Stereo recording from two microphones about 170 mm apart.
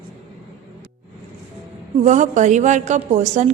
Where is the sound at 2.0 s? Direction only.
45° right (ahead or behind).